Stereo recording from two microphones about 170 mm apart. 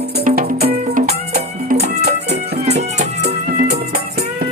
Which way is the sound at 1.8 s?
70° right (ahead or behind).